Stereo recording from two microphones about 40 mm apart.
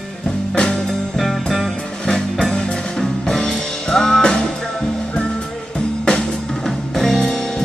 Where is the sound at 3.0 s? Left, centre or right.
Centre.